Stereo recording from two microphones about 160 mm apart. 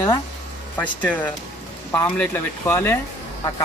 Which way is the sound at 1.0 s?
10° left (ahead or behind).